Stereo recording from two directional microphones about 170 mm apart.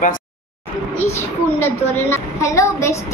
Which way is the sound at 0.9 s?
15° left (ahead or behind).